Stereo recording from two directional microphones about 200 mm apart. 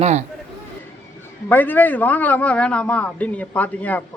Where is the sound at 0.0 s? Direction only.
35° right (ahead or behind).